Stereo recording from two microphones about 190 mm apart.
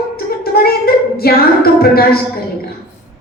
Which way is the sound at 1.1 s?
55° left (ahead or behind).